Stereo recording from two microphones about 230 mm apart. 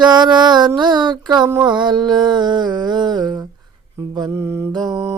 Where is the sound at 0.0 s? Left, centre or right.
Centre.